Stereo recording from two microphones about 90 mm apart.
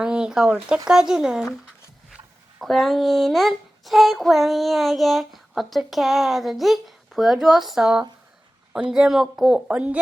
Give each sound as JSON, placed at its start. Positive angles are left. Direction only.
{"t": 0.0, "sound": "speech", "side_deg": -10}
{"t": 2.6, "sound": "speech", "side_deg": 0}
{"t": 9.6, "sound": "speech", "side_deg": -15}